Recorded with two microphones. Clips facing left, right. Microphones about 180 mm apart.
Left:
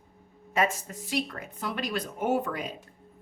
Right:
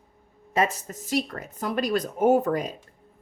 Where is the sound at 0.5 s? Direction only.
40° right (ahead or behind).